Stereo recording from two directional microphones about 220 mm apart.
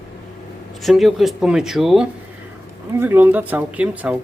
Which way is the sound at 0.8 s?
Centre (ahead or behind).